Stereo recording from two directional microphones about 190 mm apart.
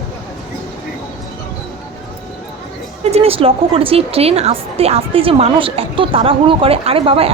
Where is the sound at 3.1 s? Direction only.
30° right (ahead or behind).